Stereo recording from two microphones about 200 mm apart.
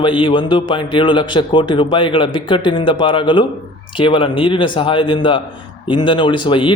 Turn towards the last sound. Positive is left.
turn(degrees=25)  # may be behind; listen again after turning